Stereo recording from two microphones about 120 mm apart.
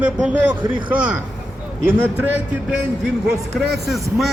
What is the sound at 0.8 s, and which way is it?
Speech, 10° right (ahead or behind).